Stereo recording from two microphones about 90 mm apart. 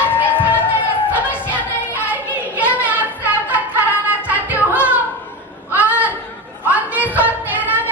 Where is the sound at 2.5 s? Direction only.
15° right (ahead or behind).